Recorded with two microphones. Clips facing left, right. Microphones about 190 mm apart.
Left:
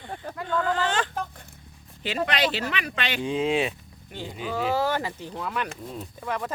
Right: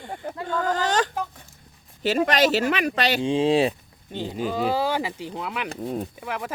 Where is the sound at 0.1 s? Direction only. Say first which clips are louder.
Right 2 dB; 25° right (ahead or behind).